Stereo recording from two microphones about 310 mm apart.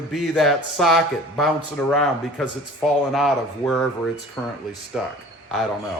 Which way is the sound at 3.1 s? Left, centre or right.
Centre.